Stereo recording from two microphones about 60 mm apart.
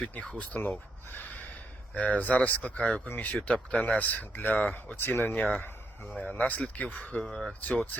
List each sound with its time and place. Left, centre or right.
0.3 s speech: centre
0.6 s speech: left
2.0 s speech: left
5.5 s a sound: left
6.1 s speech: centre
7.3 s speech: centre